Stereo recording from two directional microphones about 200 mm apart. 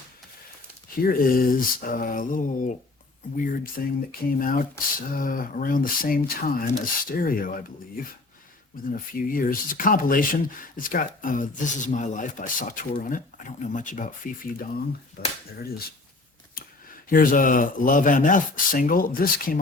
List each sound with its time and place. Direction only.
1.0 s speech: 45° left (ahead or behind)
16.6 s a sound: 45° left (ahead or behind)
17.1 s speech: 45° left (ahead or behind)